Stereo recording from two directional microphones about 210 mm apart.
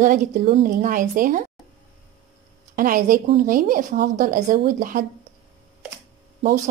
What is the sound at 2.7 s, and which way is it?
Speech, 40° right (ahead or behind).